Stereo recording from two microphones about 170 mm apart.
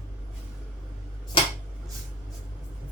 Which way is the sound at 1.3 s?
30° left (ahead or behind).